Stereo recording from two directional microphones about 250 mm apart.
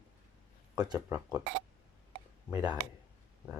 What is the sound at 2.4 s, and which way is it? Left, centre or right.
Speech, centre.